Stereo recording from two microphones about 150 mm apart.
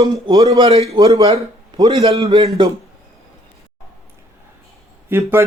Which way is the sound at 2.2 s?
45° right (ahead or behind).